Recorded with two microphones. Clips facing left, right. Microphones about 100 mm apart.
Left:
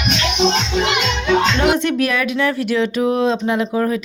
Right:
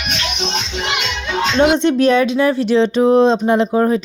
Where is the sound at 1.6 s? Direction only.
30° right (ahead or behind).